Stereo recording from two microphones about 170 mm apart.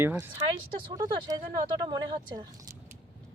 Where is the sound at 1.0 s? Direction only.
25° right (ahead or behind).